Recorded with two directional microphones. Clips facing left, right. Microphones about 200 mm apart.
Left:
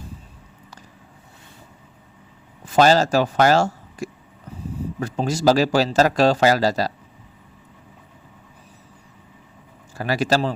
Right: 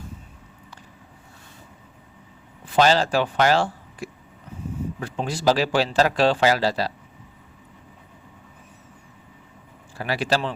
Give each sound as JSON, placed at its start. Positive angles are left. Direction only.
{"t": 2.6, "sound": "speech", "side_deg": 45}
{"t": 10.0, "sound": "speech", "side_deg": 40}